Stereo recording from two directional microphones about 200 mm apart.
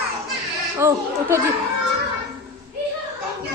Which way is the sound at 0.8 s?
15° right (ahead or behind).